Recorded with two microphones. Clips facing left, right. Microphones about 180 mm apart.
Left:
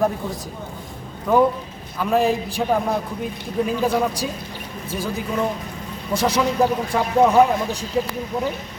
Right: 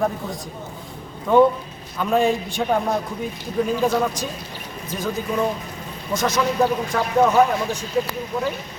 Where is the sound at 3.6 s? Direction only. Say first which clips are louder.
Even; 10° left (ahead or behind).